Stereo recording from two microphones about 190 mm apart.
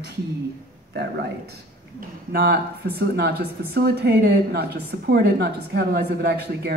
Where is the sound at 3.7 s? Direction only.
55° right (ahead or behind).